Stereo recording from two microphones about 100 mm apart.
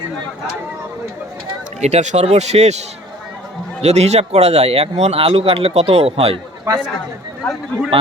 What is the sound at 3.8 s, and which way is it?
A man's voice, 90° right.